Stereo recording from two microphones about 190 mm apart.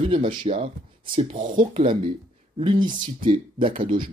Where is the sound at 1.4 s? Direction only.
45° right (ahead or behind).